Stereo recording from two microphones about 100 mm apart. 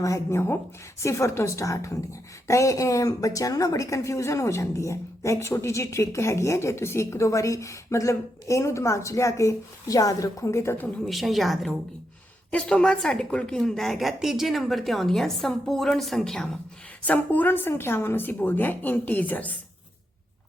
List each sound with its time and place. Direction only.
0.0 s a woman's voice: 30° left (ahead or behind)
11.0 s a woman's voice: centre (ahead or behind)
12.5 s a woman's voice: 10° left (ahead or behind)
17.1 s a woman's voice: 15° left (ahead or behind)